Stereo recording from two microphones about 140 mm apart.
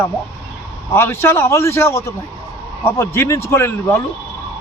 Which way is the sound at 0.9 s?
15° left (ahead or behind).